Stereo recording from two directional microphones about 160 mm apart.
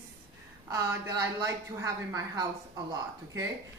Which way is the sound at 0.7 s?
20° right (ahead or behind).